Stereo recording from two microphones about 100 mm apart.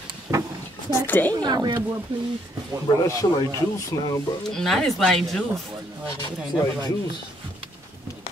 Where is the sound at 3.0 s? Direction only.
35° left (ahead or behind).